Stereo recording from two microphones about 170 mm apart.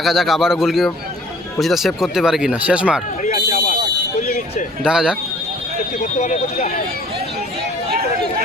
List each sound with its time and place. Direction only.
0.0 s speech: centre (ahead or behind)
3.2 s a sound: 50° left (ahead or behind)
4.8 s speech: 5° right (ahead or behind)
6.1 s speech: 45° left (ahead or behind)